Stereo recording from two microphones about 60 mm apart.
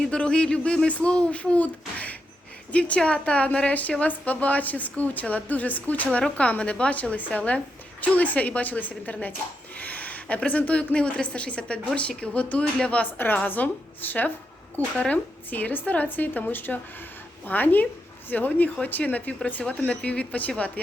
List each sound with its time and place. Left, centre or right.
0.1 s speech: centre
13.1 s a woman's voice: left
14.9 s speech: centre
15.4 s speech: left